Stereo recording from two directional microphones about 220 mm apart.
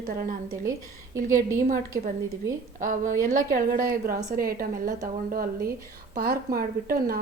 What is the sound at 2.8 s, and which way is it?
A woman's voice, 35° right (ahead or behind).